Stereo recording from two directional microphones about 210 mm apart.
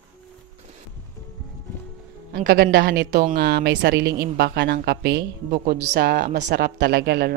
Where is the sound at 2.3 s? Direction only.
50° right (ahead or behind).